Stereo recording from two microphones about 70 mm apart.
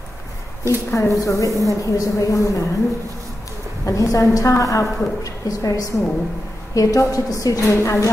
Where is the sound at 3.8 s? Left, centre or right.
Left.